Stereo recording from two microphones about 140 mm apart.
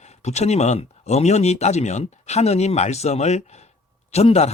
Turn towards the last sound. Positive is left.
turn(degrees=50)  # may be behind; listen again after turning